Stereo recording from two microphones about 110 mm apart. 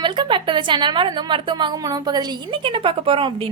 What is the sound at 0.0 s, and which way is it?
A woman's voice, 45° right (ahead or behind).